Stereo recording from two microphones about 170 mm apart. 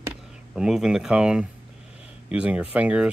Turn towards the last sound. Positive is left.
turn(degrees=-5)  # may be behind; listen again after turning